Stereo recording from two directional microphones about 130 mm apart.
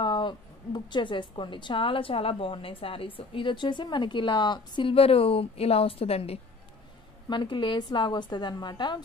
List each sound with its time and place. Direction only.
0.0 s a woman's voice: 35° left (ahead or behind)
7.2 s a woman's voice: 35° left (ahead or behind)